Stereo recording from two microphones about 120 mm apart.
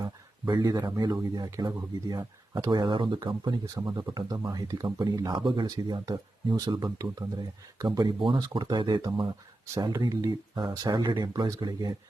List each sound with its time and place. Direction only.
0.0 s speech: 40° right (ahead or behind)